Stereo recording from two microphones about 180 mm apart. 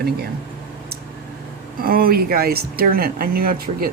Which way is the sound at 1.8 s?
55° right (ahead or behind).